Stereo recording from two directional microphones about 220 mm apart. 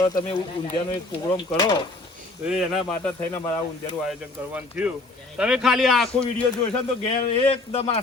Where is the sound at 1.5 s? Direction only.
15° left (ahead or behind).